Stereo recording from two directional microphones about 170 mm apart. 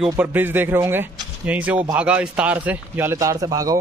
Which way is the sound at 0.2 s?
10° right (ahead or behind).